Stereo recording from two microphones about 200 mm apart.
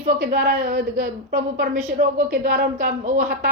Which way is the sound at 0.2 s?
40° right (ahead or behind).